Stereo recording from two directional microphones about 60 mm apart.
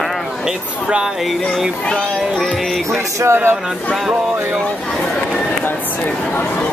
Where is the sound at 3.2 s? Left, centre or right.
Right.